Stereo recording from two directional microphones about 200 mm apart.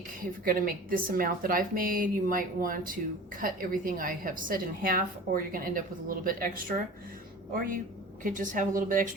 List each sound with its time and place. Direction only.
0.2 s a woman's voice: 45° right (ahead or behind)